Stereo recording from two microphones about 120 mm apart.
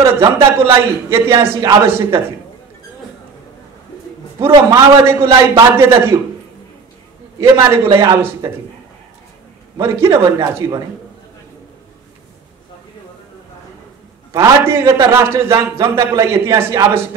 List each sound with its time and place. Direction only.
0.0 s a man's voice: 20° right (ahead or behind)
4.4 s a man's voice: 25° right (ahead or behind)
7.3 s a man's voice: 20° right (ahead or behind)
9.8 s a man's voice: 20° right (ahead or behind)
14.3 s a man's voice: 20° right (ahead or behind)